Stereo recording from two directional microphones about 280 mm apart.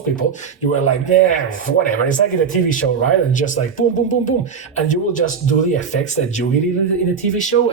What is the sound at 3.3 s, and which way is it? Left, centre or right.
Speech, left.